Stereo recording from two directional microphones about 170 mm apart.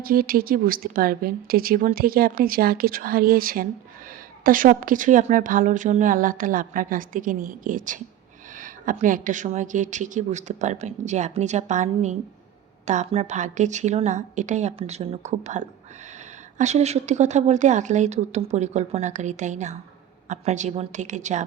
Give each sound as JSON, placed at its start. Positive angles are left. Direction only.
{"t": 0.0, "sound": "a woman's voice", "side_deg": -60}